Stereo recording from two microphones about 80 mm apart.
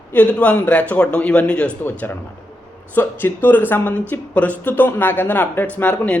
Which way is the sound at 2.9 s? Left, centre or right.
Left.